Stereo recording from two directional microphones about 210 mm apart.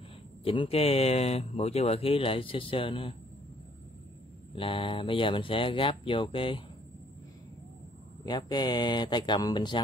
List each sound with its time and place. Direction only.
0.4 s speech: 25° left (ahead or behind)
4.6 s speech: 25° left (ahead or behind)
8.3 s speech: 20° left (ahead or behind)